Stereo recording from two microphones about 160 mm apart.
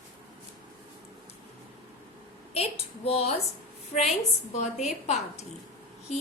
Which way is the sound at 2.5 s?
40° left (ahead or behind).